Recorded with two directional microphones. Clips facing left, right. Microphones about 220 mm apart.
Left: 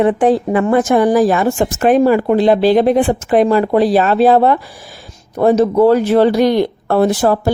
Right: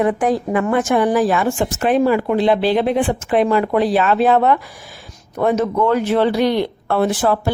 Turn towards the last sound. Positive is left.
turn(degrees=40)  # may be behind; listen again after turning